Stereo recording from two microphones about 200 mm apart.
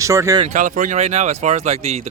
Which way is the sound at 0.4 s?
40° right (ahead or behind).